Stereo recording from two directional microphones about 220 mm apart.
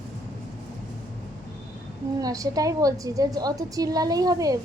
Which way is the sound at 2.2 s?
15° right (ahead or behind).